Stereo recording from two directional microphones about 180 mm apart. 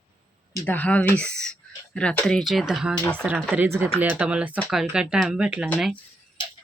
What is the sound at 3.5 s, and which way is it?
Speech, 10° right (ahead or behind).